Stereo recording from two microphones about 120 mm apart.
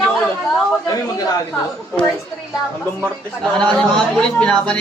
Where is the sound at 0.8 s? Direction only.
30° left (ahead or behind).